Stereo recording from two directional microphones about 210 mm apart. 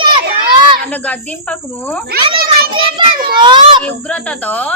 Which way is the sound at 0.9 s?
5° left (ahead or behind).